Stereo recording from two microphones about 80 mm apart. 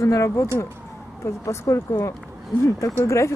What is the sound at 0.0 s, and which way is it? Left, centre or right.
Speech, left.